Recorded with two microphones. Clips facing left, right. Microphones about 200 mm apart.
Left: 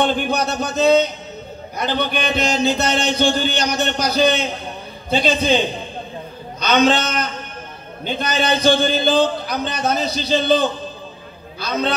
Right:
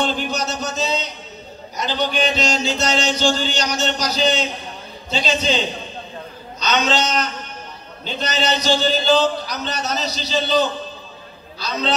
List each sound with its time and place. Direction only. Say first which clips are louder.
0.0 s a man's voice: left 4 dB; 55° left (ahead or behind)
6.6 s a man's voice: left 4 dB; 55° left (ahead or behind)